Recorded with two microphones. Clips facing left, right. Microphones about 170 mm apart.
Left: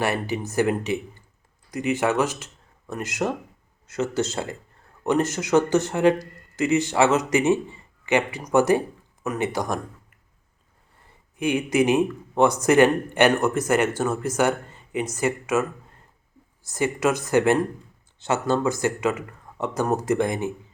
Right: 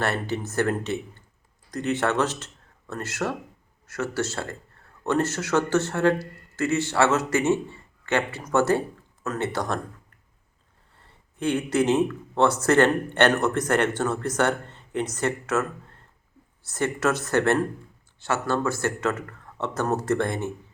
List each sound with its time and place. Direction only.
0.0 s speech: 10° left (ahead or behind)
11.3 s speech: 10° left (ahead or behind)
16.6 s speech: 10° left (ahead or behind)